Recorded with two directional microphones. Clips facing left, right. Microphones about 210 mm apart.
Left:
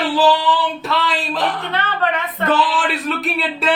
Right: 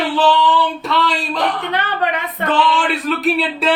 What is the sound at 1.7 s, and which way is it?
Speech, 15° right (ahead or behind).